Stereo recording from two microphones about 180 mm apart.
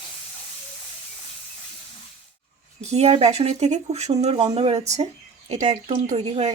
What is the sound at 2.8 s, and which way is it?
Speech, 35° right (ahead or behind).